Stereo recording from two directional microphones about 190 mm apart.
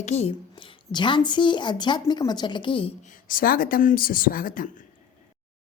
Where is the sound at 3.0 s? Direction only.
45° left (ahead or behind).